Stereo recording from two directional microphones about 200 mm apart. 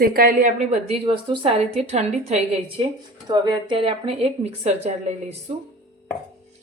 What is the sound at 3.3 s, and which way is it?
A woman's voice, 20° right (ahead or behind).